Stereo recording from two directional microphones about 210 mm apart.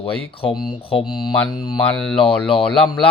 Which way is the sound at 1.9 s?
5° left (ahead or behind).